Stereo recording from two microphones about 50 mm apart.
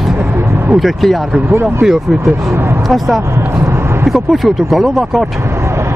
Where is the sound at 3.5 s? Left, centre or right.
Right.